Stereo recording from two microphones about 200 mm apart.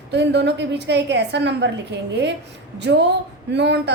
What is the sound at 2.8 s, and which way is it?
A woman's voice, 60° right (ahead or behind).